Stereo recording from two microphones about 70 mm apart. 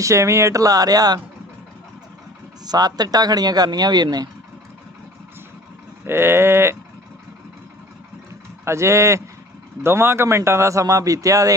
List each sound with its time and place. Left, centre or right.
0.0 s speech: right
2.6 s speech: right
6.1 s livestock: right
8.6 s a man's voice: right